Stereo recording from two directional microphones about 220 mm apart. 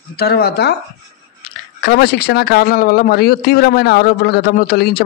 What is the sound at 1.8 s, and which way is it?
Speech, 50° left (ahead or behind).